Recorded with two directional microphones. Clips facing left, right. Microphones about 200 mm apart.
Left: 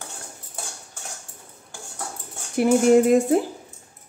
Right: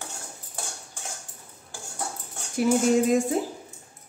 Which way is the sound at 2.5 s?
60° left (ahead or behind).